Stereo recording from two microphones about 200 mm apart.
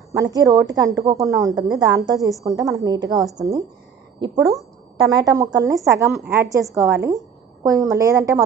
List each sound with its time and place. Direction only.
0.1 s a woman's voice: 15° right (ahead or behind)
6.0 s a woman's voice: centre (ahead or behind)
6.3 s a woman's voice: 15° right (ahead or behind)